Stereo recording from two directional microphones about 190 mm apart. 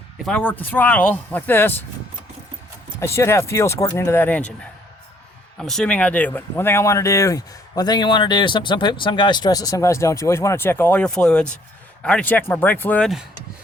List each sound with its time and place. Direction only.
0.3 s speech: 10° left (ahead or behind)
3.0 s speech: 15° left (ahead or behind)
5.5 s speech: centre (ahead or behind)